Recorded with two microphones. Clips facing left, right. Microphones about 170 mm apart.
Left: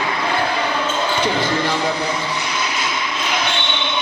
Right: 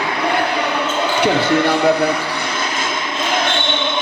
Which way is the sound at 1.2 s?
60° right (ahead or behind).